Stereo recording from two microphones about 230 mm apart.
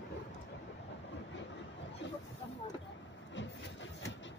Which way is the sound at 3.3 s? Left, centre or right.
Left.